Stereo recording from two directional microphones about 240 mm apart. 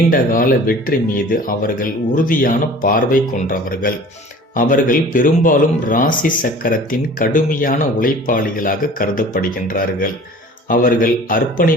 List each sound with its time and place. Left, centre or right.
0.1 s speech: left